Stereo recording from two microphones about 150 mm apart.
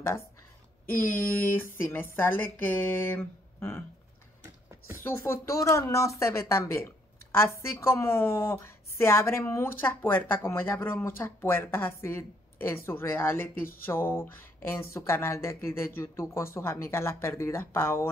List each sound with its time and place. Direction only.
1.0 s a woman's voice: 10° left (ahead or behind)
4.9 s a woman's voice: 15° left (ahead or behind)